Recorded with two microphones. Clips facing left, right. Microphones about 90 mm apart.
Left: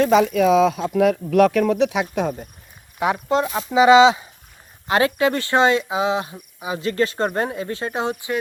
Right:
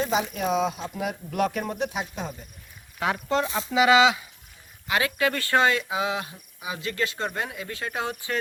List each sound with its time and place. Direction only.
0.0 s speech: 90° left
2.2 s speech: 55° left (ahead or behind)
3.0 s speech: 20° left (ahead or behind)